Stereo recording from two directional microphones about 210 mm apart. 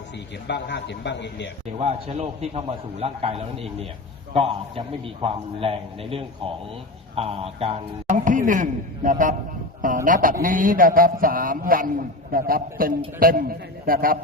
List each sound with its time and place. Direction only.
0.4 s a man's voice: 55° left (ahead or behind)
1.8 s a man's voice: 30° right (ahead or behind)